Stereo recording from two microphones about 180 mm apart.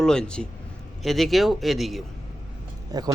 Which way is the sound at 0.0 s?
5° left (ahead or behind).